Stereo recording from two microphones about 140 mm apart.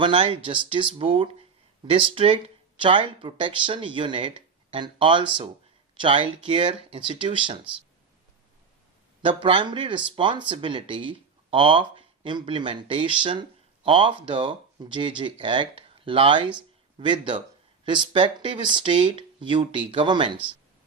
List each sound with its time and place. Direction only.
0.0 s speech: 40° right (ahead or behind)
9.2 s speech: 40° right (ahead or behind)